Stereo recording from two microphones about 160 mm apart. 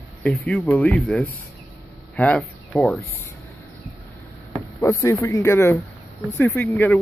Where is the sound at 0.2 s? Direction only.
5° left (ahead or behind).